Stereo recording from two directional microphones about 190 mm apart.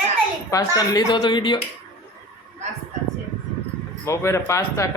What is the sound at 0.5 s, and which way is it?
A woman's voice, 20° left (ahead or behind).